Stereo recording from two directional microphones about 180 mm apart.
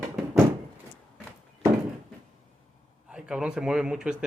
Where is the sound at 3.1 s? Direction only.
5° right (ahead or behind).